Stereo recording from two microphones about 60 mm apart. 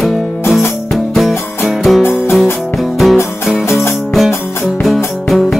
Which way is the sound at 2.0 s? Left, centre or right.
Left.